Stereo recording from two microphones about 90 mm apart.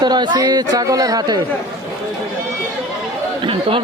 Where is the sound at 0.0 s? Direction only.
55° right (ahead or behind).